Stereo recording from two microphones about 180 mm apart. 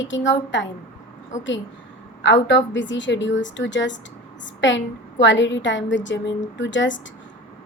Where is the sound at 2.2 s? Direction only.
85° left.